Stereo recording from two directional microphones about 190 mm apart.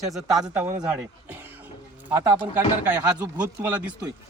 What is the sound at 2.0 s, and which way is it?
Speech, 10° right (ahead or behind).